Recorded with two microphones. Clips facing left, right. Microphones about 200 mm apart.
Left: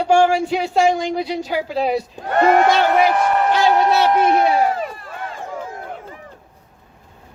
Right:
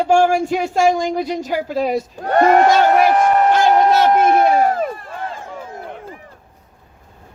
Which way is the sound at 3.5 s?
50° right (ahead or behind).